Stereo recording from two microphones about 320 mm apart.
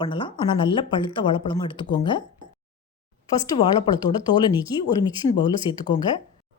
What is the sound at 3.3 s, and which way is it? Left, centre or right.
Speech, centre.